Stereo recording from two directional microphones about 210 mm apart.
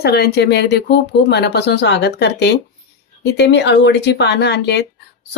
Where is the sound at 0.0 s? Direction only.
50° left (ahead or behind).